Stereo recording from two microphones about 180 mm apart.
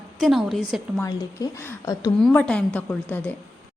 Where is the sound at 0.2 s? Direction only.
Centre (ahead or behind).